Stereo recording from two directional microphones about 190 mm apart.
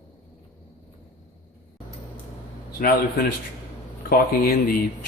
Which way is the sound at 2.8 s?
50° left (ahead or behind).